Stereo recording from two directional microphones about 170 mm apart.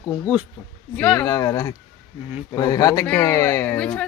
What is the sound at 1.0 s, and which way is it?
Speech, 10° left (ahead or behind).